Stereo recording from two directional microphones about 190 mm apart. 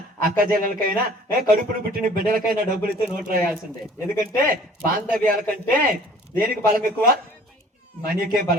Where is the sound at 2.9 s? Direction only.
50° right (ahead or behind).